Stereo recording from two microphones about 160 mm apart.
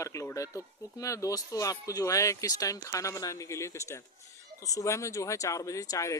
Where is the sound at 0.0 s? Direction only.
20° left (ahead or behind).